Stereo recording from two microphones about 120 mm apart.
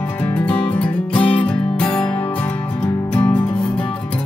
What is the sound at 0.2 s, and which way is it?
Music, 10° left (ahead or behind).